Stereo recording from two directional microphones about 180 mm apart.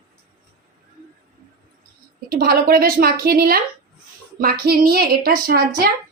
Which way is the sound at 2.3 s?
55° right (ahead or behind).